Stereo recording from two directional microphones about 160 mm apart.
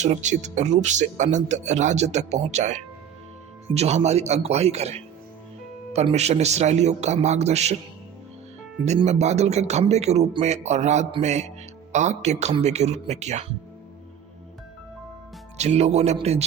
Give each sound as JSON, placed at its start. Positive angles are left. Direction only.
{"t": 0.0, "sound": "speech", "side_deg": -50}
{"t": 9.0, "sound": "speech", "side_deg": -45}
{"t": 15.5, "sound": "speech", "side_deg": -45}